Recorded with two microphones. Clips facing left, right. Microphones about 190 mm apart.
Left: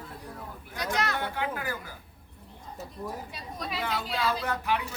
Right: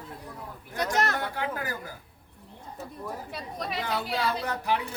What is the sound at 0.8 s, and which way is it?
Speech, 50° right (ahead or behind).